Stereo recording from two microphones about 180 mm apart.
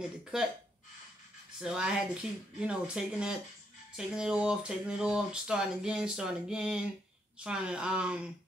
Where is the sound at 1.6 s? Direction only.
5° right (ahead or behind).